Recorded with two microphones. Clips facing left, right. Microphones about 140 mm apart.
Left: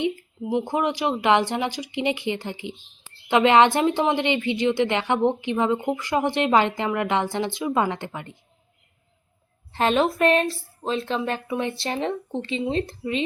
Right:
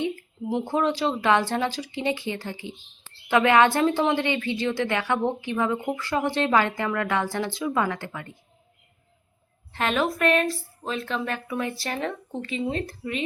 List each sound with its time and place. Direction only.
0.5 s speech: 15° left (ahead or behind)
9.7 s speech: 30° left (ahead or behind)